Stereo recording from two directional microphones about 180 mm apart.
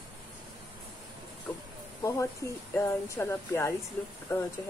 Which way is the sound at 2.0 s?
20° left (ahead or behind).